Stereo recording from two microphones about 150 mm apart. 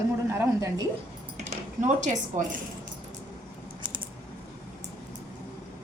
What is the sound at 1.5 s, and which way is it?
Speech, 55° right (ahead or behind).